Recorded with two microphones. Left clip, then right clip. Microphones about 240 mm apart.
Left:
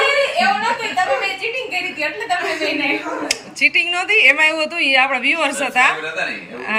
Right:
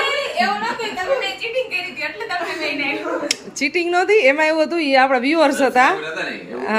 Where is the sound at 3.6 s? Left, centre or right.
Centre.